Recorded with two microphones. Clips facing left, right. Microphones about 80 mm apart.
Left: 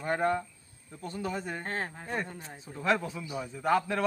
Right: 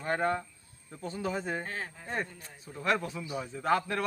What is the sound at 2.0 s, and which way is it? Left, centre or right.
Speech, centre.